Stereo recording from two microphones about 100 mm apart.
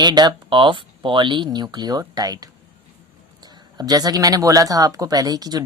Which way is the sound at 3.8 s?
40° right (ahead or behind).